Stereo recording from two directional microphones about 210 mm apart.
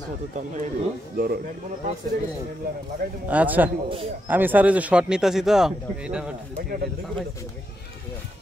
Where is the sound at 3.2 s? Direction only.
5° right (ahead or behind).